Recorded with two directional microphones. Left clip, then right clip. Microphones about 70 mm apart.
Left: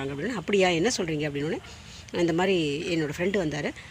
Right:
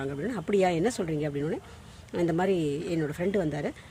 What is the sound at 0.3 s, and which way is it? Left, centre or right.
Speech, right.